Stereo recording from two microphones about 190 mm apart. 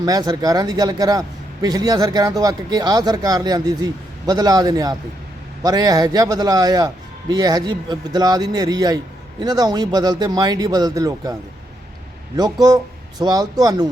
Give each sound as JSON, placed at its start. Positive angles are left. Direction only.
{"t": 0.0, "sound": "speech", "side_deg": -20}
{"t": 12.4, "sound": "speech", "side_deg": -20}